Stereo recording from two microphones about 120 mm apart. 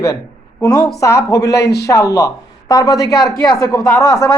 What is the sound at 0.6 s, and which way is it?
Speech, 30° left (ahead or behind).